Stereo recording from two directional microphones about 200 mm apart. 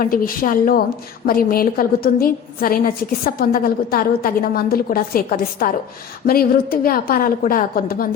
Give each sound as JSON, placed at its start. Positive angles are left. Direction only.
{"t": 0.0, "sound": "a woman's voice", "side_deg": 45}